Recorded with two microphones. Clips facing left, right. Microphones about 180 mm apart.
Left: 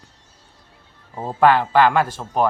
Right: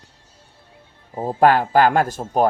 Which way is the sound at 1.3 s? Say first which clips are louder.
Even; 45° right (ahead or behind).